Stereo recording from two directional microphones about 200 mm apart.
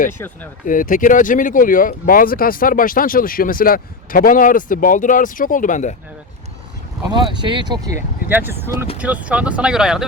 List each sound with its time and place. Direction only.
0.6 s speech: 45° left (ahead or behind)
7.1 s speech: 25° right (ahead or behind); by 10.1 s 5° right (ahead or behind)